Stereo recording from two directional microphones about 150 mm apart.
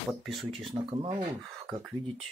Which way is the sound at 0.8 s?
30° right (ahead or behind).